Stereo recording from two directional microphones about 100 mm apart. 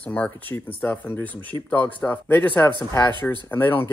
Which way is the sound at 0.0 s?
15° left (ahead or behind).